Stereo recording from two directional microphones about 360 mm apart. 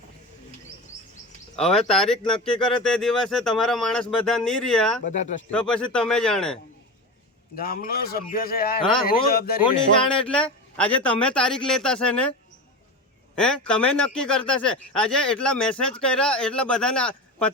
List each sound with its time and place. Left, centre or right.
1.5 s a man's voice: centre
5.0 s a man's voice: left
5.5 s a man's voice: centre
7.5 s a man's voice: left
9.6 s a man's voice: centre
13.3 s a man's voice: centre